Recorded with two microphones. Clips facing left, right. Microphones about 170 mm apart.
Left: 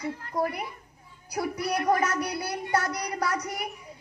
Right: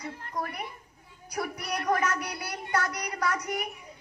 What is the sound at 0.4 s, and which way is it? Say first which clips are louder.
A child's voice: left 6 dB; 30° left (ahead or behind).